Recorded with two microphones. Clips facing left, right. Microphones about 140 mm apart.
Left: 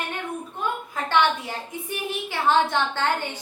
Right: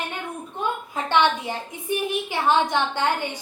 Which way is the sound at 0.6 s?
20° right (ahead or behind).